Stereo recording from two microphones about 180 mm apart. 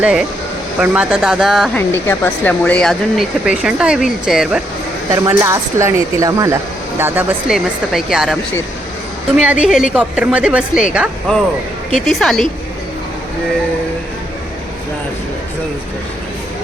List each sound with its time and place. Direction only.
0.0 s speech: 5° right (ahead or behind)
1.9 s speech: 10° left (ahead or behind)
5.1 s speech: 20° right (ahead or behind); by 8.4 s centre (ahead or behind)
9.4 s speech: 5° right (ahead or behind)